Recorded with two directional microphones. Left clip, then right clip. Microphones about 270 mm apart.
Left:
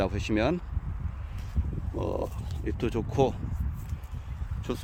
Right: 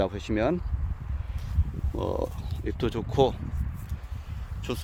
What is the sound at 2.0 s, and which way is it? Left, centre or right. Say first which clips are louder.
Speech: right 2 dB; centre.